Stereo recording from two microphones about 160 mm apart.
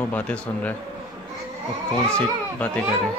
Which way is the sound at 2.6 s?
5° left (ahead or behind).